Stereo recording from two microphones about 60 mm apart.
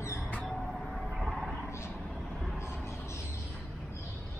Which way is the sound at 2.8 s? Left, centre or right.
Left.